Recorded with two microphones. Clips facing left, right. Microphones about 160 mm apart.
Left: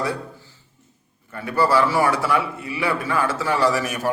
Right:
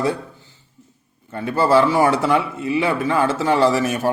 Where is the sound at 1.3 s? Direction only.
25° right (ahead or behind).